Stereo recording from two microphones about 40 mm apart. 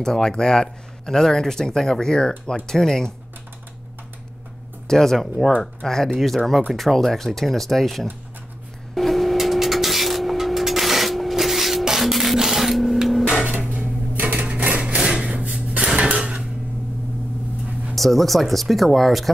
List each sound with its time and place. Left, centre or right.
0.0 s speech: centre
4.8 s speech: centre
8.9 s music: centre
12.0 s printer: centre
14.3 s a sound: right
14.6 s wood: right
15.0 s a sound: centre
17.9 s speech: centre